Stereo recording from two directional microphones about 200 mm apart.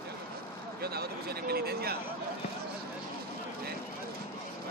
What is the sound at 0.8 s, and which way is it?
Speech, 50° right (ahead or behind).